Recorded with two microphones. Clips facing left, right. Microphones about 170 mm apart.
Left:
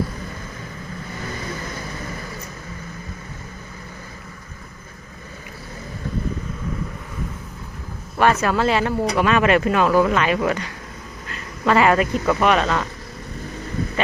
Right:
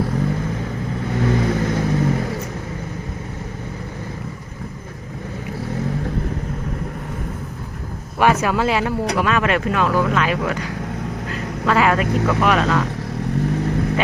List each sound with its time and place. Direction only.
1.2 s vehicle: 65° right (ahead or behind)
8.2 s speech: 10° right (ahead or behind)
13.4 s vehicle: 75° right (ahead or behind)